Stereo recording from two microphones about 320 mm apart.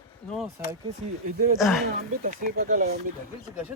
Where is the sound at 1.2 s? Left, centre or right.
Right.